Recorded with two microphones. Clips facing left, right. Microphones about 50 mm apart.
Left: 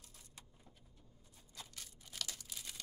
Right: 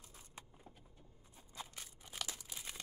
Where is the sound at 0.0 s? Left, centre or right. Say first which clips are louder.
Right 4 dB; right.